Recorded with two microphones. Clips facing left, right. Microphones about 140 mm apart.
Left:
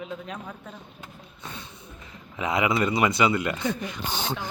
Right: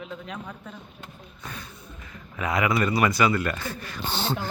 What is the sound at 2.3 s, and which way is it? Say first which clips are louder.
Speech: even; 20° left (ahead or behind).